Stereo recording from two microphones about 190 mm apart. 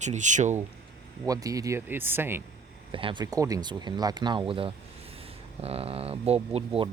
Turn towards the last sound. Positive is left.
turn(degrees=-30)  # may be behind; listen again after turning